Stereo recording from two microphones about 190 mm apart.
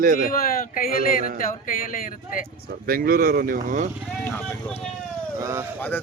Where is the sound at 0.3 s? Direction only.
45° left (ahead or behind).